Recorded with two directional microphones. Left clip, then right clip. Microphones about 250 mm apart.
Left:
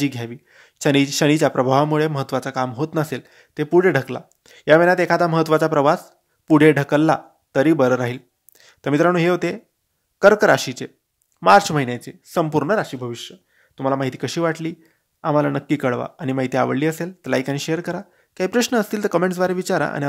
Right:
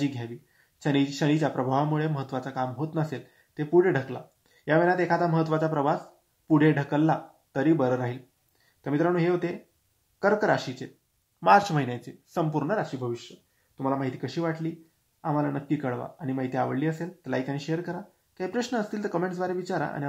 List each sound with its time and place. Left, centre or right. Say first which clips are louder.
0.0 s speech: left 7 dB; left